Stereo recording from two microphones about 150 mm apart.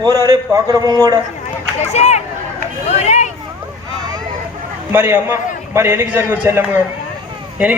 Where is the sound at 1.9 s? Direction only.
50° left (ahead or behind).